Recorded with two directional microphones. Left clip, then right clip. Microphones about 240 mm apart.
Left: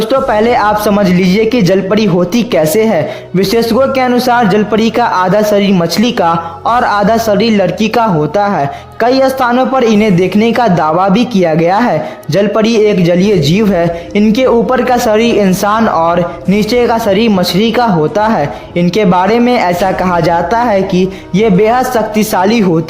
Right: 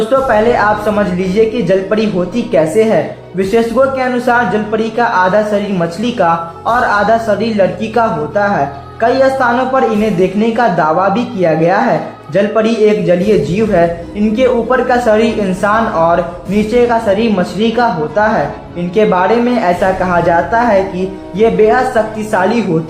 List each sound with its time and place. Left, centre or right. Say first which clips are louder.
0.1 s speech: left 1 dB; left
14.3 s speech: even; left